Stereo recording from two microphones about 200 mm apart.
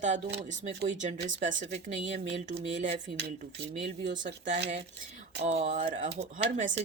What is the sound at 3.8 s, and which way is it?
Speech, 40° right (ahead or behind).